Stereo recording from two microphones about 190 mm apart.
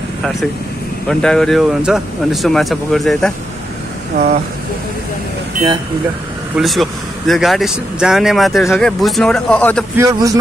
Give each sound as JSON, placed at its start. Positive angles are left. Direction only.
{"t": 1.0, "sound": "speech", "side_deg": 5}
{"t": 6.5, "sound": "speech", "side_deg": 0}
{"t": 9.9, "sound": "speech", "side_deg": -20}